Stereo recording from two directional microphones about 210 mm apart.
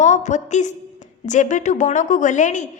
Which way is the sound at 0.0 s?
35° left (ahead or behind).